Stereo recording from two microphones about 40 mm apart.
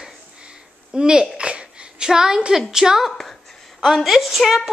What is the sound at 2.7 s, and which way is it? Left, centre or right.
Speech, centre.